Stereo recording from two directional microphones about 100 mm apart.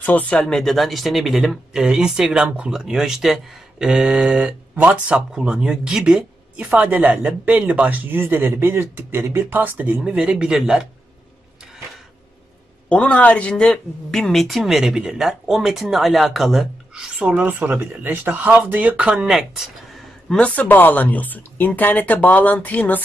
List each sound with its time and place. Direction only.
0.0 s speech: 15° left (ahead or behind); by 10.9 s 5° right (ahead or behind)
12.9 s speech: 15° left (ahead or behind)
20.3 s speech: 15° left (ahead or behind)